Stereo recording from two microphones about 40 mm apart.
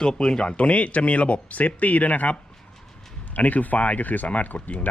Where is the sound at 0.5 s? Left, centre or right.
Left.